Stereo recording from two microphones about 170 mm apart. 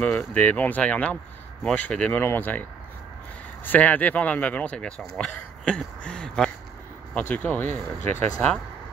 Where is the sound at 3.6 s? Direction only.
10° left (ahead or behind).